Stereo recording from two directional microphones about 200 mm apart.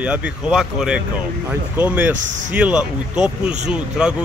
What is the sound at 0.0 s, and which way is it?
Speech, 5° right (ahead or behind).